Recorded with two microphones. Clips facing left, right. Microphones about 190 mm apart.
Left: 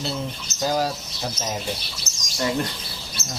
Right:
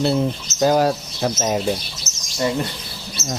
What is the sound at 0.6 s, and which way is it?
Speech, 60° right (ahead or behind).